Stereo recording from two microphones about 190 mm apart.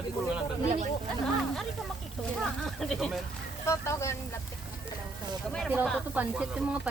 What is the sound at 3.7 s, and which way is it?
Speech, 15° left (ahead or behind).